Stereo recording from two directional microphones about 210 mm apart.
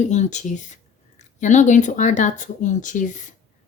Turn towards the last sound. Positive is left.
turn(degrees=35)  # may be behind; listen again after turning